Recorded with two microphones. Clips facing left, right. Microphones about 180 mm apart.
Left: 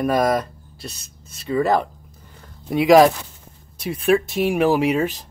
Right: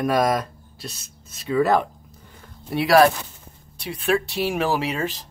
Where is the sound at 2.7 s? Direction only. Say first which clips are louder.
Left 4 dB; 15° left (ahead or behind).